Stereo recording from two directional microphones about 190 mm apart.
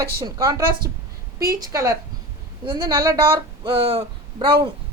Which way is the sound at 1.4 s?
50° right (ahead or behind).